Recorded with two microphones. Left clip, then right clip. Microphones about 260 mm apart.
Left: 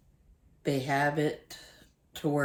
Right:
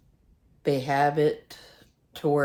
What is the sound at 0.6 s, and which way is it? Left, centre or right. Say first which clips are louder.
Speech: right 5 dB; centre.